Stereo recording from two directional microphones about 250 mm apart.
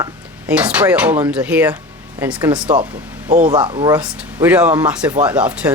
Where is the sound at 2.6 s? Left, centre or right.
Right.